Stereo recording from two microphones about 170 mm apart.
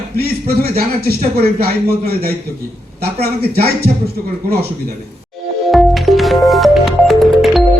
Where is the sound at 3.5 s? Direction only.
65° right (ahead or behind).